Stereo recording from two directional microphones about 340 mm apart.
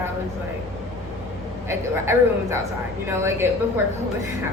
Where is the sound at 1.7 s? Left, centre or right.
Centre.